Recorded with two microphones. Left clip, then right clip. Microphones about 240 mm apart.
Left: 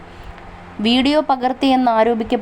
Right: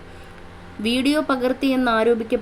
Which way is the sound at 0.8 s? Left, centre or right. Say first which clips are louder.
Left 5 dB; centre.